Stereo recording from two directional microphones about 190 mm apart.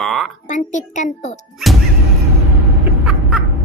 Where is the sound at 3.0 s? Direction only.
5° right (ahead or behind).